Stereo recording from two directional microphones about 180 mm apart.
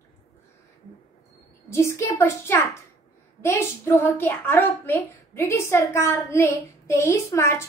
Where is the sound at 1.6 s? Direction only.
15° left (ahead or behind).